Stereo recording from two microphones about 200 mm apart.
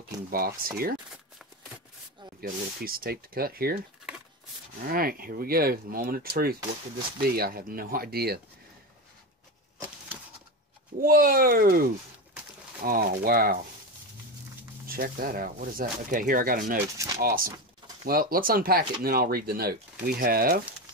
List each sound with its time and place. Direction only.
0.3 s speech: 50° right (ahead or behind)
2.4 s speech: 45° right (ahead or behind)
4.8 s speech: 45° right (ahead or behind)
11.0 s speech: 45° right (ahead or behind)
14.9 s speech: 45° right (ahead or behind)